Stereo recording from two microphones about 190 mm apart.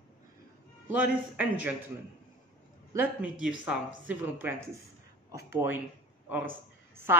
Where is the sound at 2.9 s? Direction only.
10° right (ahead or behind).